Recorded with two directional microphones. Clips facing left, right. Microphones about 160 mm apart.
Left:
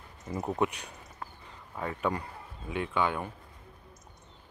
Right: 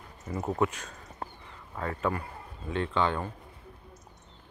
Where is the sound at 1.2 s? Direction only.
30° right (ahead or behind).